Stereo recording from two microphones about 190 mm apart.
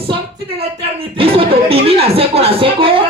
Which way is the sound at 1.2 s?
30° right (ahead or behind).